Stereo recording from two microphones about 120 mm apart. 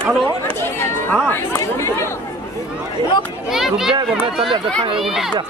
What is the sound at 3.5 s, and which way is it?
Speech, 5° right (ahead or behind).